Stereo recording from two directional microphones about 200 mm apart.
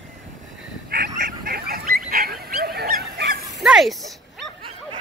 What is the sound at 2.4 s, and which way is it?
Goose, 50° right (ahead or behind).